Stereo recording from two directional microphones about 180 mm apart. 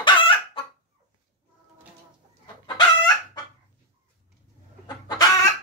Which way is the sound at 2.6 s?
25° left (ahead or behind).